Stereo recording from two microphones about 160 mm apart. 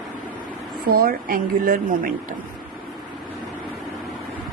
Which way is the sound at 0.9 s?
65° right (ahead or behind).